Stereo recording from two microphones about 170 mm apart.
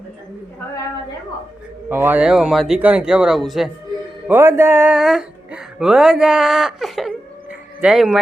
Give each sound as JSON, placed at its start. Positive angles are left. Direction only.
{"t": 1.9, "sound": "speech", "side_deg": -10}
{"t": 4.3, "sound": "speech", "side_deg": -15}